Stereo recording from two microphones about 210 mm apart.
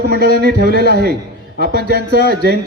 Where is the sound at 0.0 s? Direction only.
50° right (ahead or behind).